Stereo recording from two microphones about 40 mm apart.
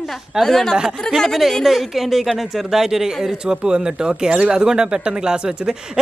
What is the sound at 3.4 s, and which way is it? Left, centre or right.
Speech, right.